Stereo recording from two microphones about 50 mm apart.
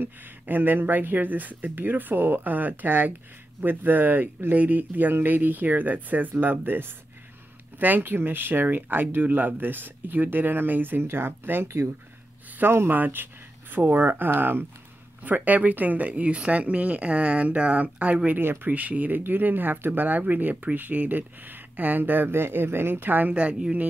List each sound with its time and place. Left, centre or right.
0.0 s speech: right
11.6 s speech: right
12.6 s speech: right
15.2 s speech: right
18.4 s speech: right
18.7 s speech: right
23.3 s speech: right